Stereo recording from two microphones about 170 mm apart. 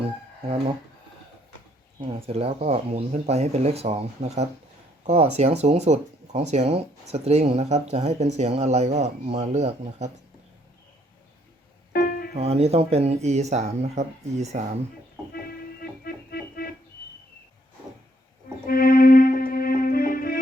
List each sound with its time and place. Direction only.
2.0 s speech: 35° right (ahead or behind)
11.9 s music: 60° left (ahead or behind)
12.3 s speech: 35° right (ahead or behind)
15.3 s organ: 65° left (ahead or behind)
18.6 s music: 60° left (ahead or behind)